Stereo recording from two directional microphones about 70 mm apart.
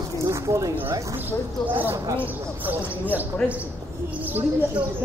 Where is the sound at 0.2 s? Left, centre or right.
Right.